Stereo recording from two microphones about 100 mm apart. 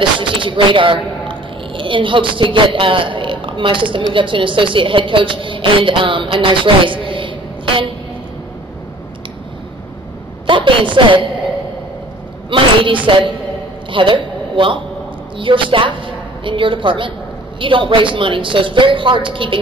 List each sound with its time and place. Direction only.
0.2 s a woman's voice: 55° right (ahead or behind)
10.4 s a woman's voice: 55° right (ahead or behind)
12.4 s a woman's voice: 55° right (ahead or behind)